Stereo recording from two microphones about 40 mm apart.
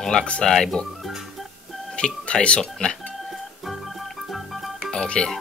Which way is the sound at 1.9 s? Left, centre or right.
Left.